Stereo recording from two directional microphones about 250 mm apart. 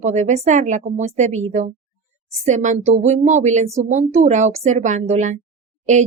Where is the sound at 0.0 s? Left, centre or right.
Right.